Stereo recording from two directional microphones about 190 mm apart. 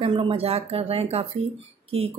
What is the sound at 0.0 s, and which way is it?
A woman's voice, 30° right (ahead or behind).